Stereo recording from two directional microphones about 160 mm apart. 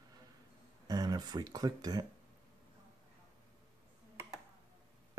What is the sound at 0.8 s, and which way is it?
Speech, 25° right (ahead or behind).